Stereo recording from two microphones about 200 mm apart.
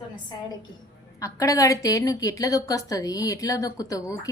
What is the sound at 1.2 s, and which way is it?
A woman's voice, 15° left (ahead or behind).